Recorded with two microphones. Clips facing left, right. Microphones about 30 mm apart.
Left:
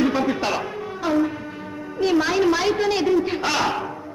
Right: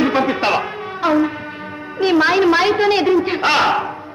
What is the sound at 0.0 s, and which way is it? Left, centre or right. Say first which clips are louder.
Music: right 5 dB; right.